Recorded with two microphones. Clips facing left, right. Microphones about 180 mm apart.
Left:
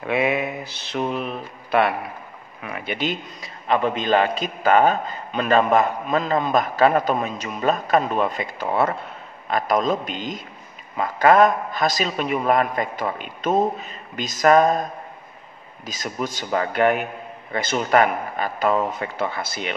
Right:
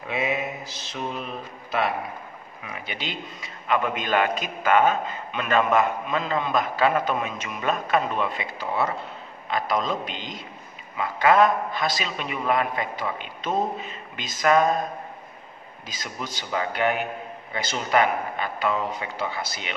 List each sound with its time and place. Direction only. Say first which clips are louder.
0.0 s mantra: left 5 dB; 65° left (ahead or behind)
1.7 s a man's voice: left 6 dB; 60° left (ahead or behind); by 14.7 s 45° left (ahead or behind)
15.8 s a man's voice: left 7 dB; 45° left (ahead or behind)